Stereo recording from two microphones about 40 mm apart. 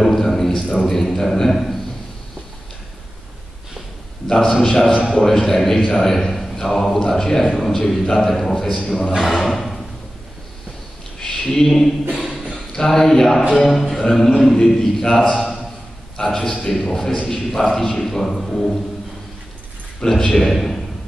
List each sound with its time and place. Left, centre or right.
0.0 s a man's voice: centre
4.5 s a man's voice: centre
9.1 s speech: centre
9.5 s a sound: centre
11.1 s a sound: centre
13.6 s a man's voice: centre
20.0 s a man's voice: centre
20.4 s a man's voice: centre